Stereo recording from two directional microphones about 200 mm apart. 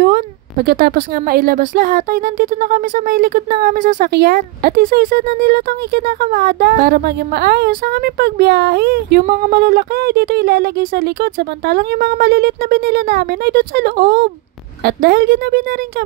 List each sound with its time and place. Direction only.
0.0 s a woman's voice: 50° right (ahead or behind)